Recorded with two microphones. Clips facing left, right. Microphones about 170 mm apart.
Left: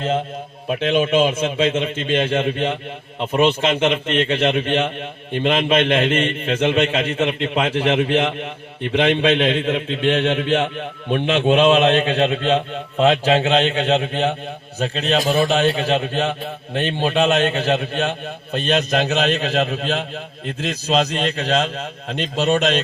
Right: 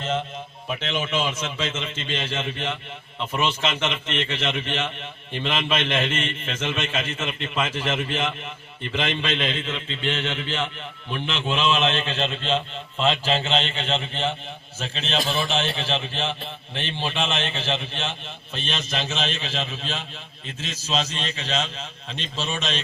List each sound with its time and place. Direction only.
0.7 s a man's voice: 55° left (ahead or behind)
14.8 s a man's voice: 40° left (ahead or behind)
15.8 s a man's voice: 60° left (ahead or behind)